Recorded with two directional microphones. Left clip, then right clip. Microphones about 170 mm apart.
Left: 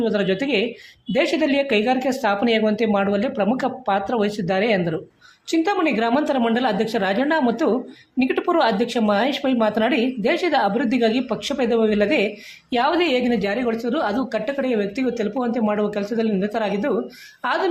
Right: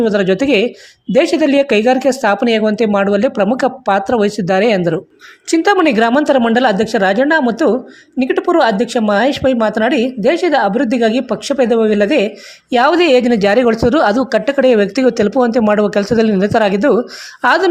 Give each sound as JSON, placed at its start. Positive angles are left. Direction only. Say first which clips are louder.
{"t": 0.0, "sound": "speech", "louder": "right 8 dB", "side_deg": -35}